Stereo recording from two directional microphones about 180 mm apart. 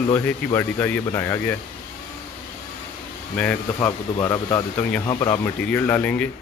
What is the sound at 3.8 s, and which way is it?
Speech, 20° left (ahead or behind).